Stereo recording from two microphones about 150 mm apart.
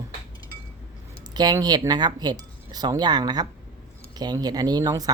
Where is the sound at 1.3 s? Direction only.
25° right (ahead or behind).